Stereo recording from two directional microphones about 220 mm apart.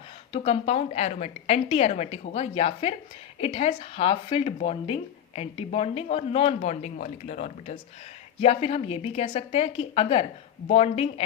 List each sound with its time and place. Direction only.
0.3 s speech: 25° left (ahead or behind)